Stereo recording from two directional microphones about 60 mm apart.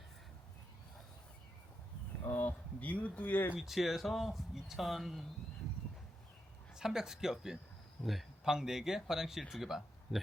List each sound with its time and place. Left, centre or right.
2.3 s speech: left
3.6 s speech: centre
6.7 s speech: centre